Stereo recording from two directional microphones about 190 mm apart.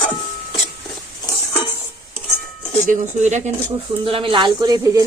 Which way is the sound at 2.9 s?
40° right (ahead or behind).